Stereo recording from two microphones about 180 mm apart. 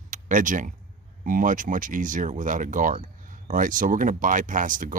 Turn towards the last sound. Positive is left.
turn(degrees=-45)  # may be behind; listen again after turning